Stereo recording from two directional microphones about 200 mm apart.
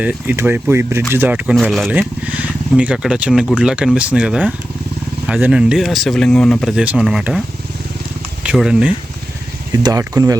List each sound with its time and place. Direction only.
0.0 s speech: 10° right (ahead or behind)
8.4 s speech: 5° right (ahead or behind)
9.8 s speech: 20° right (ahead or behind)